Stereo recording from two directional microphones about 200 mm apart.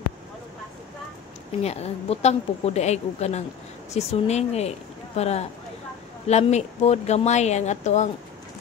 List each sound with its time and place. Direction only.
1.6 s speech: 30° left (ahead or behind)